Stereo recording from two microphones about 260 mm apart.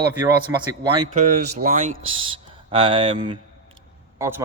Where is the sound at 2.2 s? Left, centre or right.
Centre.